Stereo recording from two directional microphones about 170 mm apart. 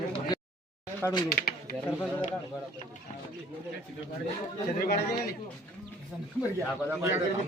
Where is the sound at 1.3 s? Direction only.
60° left (ahead or behind).